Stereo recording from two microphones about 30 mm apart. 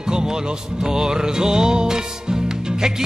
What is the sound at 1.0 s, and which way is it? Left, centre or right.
Music, right.